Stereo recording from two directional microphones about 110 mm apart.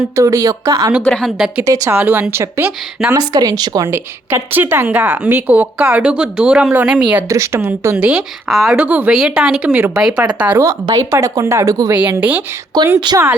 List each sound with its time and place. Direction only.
0.2 s speech: 30° right (ahead or behind)
1.0 s a woman's voice: 10° left (ahead or behind)
1.6 s speech: 30° right (ahead or behind)
2.0 s a woman's voice: 15° right (ahead or behind)
3.1 s speech: 35° right (ahead or behind)
3.8 s a woman's voice: 20° right (ahead or behind)
7.3 s speech: 30° right (ahead or behind)
7.9 s a woman's voice: 10° right (ahead or behind)
8.4 s speech: centre (ahead or behind)
8.8 s a woman's voice: 10° right (ahead or behind)
10.0 s a woman's voice: 5° right (ahead or behind)
10.6 s speech: 30° right (ahead or behind)
12.1 s a woman's voice: 15° right (ahead or behind)
12.7 s speech: 40° right (ahead or behind)